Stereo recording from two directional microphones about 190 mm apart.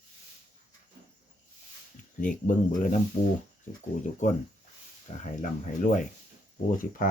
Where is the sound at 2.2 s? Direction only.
45° left (ahead or behind).